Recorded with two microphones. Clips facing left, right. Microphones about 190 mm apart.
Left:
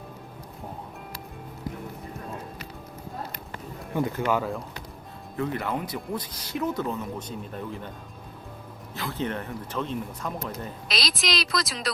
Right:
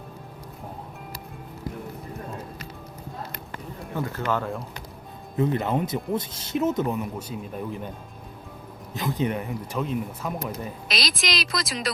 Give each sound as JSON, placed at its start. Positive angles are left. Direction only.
{"t": 3.9, "sound": "speech", "side_deg": 15}
{"t": 5.4, "sound": "speech", "side_deg": -20}
{"t": 8.9, "sound": "a woman's voice", "side_deg": -15}